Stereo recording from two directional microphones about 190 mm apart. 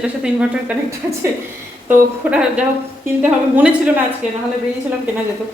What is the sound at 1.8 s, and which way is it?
Speech, 5° right (ahead or behind).